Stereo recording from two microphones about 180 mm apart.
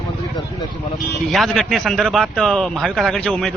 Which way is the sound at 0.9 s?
Centre (ahead or behind).